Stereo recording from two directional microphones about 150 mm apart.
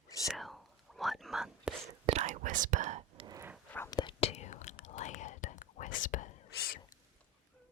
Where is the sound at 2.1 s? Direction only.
55° right (ahead or behind).